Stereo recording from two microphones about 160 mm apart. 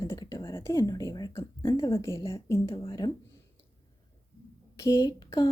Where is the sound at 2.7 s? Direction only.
30° left (ahead or behind).